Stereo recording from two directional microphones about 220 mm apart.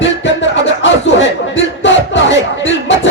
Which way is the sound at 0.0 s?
55° left (ahead or behind).